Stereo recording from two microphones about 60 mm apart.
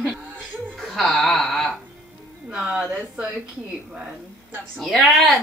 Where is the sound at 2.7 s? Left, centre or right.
Centre.